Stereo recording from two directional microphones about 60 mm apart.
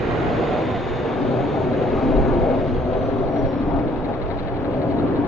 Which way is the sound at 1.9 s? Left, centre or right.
Centre.